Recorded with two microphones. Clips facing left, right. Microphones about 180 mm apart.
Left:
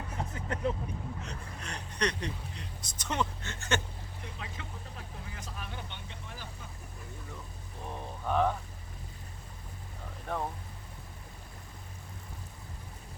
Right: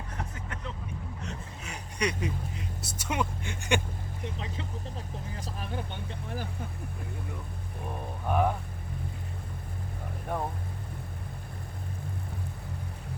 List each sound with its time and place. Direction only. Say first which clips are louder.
0.2 s vehicle: left 4 dB; 30° left (ahead or behind)
1.2 s vehicle: right 2 dB; 5° right (ahead or behind)
5.3 s speech: right 7 dB; 35° right (ahead or behind)
8.3 s speech: right 1 dB; 10° right (ahead or behind)
10.3 s speech: right 2 dB; 10° right (ahead or behind)